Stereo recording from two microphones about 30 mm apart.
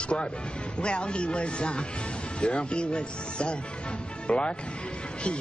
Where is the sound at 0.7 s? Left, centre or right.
Left.